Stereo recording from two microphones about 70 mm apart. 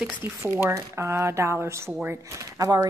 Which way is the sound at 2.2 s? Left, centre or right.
Right.